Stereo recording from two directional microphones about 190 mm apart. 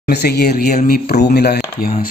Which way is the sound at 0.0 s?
60° left (ahead or behind).